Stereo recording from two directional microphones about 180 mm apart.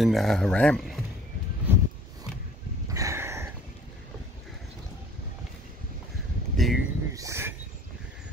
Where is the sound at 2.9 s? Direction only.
15° right (ahead or behind).